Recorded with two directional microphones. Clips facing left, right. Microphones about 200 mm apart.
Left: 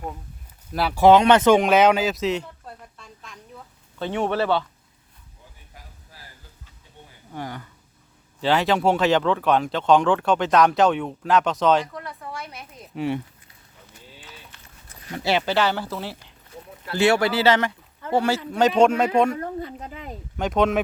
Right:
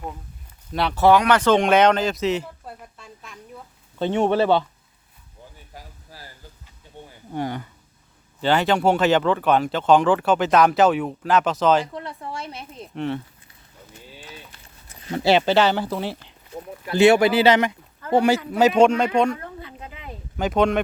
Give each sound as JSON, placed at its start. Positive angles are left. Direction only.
{"t": 0.7, "sound": "speech", "side_deg": 5}
{"t": 1.0, "sound": "speech", "side_deg": 20}
{"t": 1.5, "sound": "a sound", "side_deg": 5}
{"t": 3.9, "sound": "speech", "side_deg": -25}
{"t": 7.3, "sound": "speech", "side_deg": -25}
{"t": 8.4, "sound": "speech", "side_deg": 0}
{"t": 11.9, "sound": "speech", "side_deg": -25}
{"t": 12.9, "sound": "speech", "side_deg": 5}
{"t": 15.0, "sound": "speech", "side_deg": -30}
{"t": 18.5, "sound": "speech", "side_deg": -5}
{"t": 19.4, "sound": "speech", "side_deg": 45}
{"t": 20.3, "sound": "speech", "side_deg": 0}